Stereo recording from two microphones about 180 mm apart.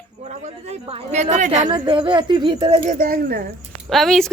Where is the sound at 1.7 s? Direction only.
25° right (ahead or behind).